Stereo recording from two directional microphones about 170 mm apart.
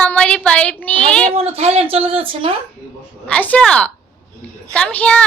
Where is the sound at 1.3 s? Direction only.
35° right (ahead or behind).